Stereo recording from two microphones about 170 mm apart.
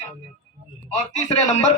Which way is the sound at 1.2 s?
40° left (ahead or behind).